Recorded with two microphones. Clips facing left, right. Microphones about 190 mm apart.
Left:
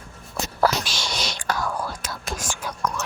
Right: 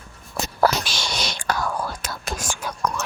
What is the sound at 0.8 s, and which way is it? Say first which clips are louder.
Whispering: right 1 dB; 60° right (ahead or behind).